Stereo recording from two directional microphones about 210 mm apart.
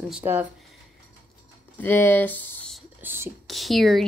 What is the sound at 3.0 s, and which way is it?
Speech, 10° right (ahead or behind).